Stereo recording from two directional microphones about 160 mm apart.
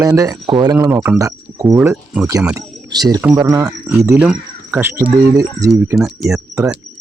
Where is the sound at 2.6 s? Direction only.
25° right (ahead or behind).